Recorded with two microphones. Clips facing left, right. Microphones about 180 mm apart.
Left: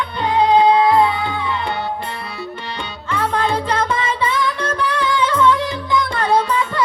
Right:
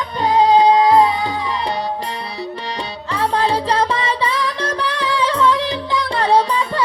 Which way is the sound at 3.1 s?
35° right (ahead or behind).